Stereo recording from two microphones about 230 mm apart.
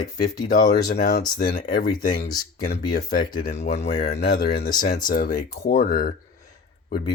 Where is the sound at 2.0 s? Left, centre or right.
Left.